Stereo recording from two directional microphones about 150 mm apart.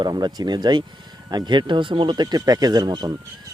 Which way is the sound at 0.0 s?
30° right (ahead or behind).